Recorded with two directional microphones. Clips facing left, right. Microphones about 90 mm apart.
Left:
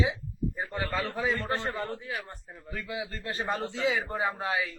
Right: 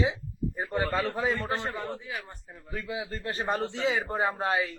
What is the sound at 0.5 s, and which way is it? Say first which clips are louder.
A man's voice: right 5 dB; 20° right (ahead or behind).